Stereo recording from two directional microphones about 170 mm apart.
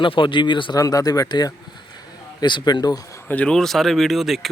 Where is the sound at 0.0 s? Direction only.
30° left (ahead or behind).